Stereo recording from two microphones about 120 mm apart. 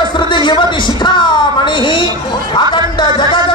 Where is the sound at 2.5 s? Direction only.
40° left (ahead or behind).